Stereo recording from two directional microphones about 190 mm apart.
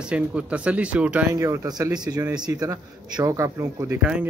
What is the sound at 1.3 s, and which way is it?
A man's voice, 15° right (ahead or behind).